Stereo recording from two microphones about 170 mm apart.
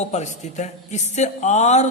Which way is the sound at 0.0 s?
40° left (ahead or behind).